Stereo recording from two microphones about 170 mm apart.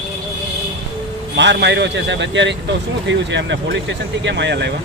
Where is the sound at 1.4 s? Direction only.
90° right.